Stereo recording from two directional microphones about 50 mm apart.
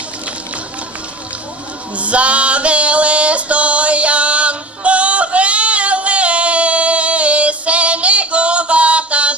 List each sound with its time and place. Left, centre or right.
2.0 s female singing: right